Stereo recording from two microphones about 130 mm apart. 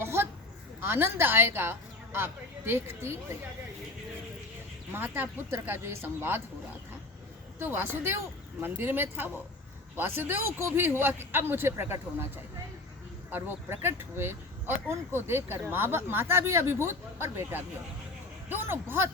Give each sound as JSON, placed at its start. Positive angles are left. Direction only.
{"t": 0.0, "sound": "a sound", "side_deg": -20}
{"t": 0.8, "sound": "speech", "side_deg": -15}
{"t": 4.9, "sound": "speech", "side_deg": -15}
{"t": 7.6, "sound": "speech", "side_deg": -15}
{"t": 13.3, "sound": "speech", "side_deg": -20}